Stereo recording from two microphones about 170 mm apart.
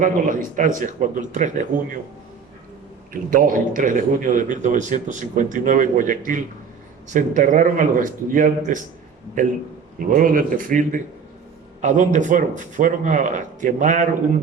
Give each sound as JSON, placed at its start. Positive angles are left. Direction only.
{"t": 0.0, "sound": "a man's voice", "side_deg": -50}
{"t": 3.1, "sound": "a man's voice", "side_deg": -55}
{"t": 10.0, "sound": "a man's voice", "side_deg": -55}